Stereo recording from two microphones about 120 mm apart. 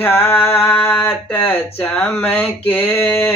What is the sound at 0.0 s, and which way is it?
Speech, 20° left (ahead or behind).